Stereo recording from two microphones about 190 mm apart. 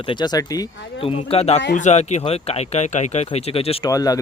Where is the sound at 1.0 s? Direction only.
30° left (ahead or behind).